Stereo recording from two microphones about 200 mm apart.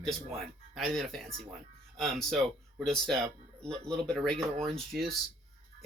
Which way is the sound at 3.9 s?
5° left (ahead or behind).